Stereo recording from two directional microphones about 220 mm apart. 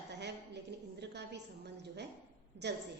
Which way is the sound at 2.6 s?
50° right (ahead or behind).